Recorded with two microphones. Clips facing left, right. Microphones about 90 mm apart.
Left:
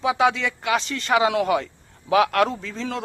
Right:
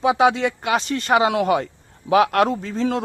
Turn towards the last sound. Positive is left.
turn(degrees=-40)  # may be behind; listen again after turning